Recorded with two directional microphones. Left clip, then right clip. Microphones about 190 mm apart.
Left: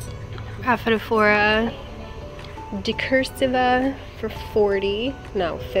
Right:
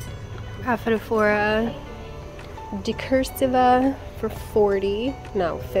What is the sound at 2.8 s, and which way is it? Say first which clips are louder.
A woman's voice: left 2 dB; 15° right (ahead or behind).